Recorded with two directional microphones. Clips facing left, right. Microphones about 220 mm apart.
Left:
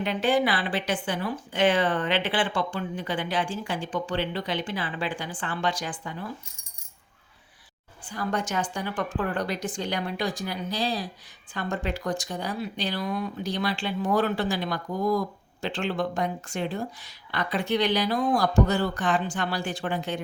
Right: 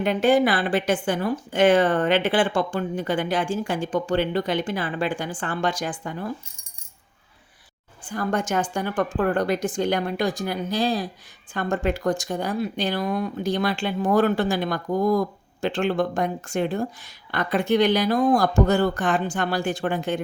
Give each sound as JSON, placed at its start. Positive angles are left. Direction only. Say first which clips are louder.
{"t": 0.0, "sound": "speech", "louder": "right 5 dB", "side_deg": -45}
{"t": 8.0, "sound": "speech", "louder": "right 4 dB", "side_deg": -50}